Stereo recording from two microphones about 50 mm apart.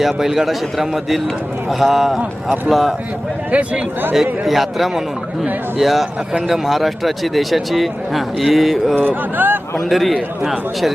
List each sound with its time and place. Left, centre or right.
0.0 s speech: centre
3.5 s speech: right
4.1 s speech: centre
9.0 s speech: right
9.9 s speech: centre